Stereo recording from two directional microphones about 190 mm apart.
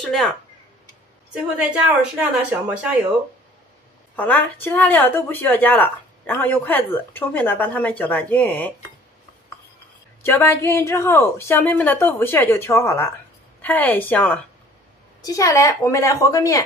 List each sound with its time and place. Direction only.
0.0 s speech: centre (ahead or behind)
2.1 s speech: 5° right (ahead or behind)
4.2 s speech: 10° left (ahead or behind)
10.2 s speech: 10° left (ahead or behind)